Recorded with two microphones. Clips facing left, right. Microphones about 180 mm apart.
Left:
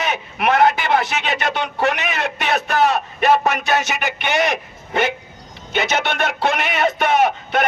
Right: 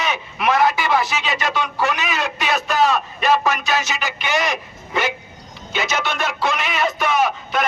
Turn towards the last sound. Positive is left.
turn(degrees=60)  # may be behind; listen again after turning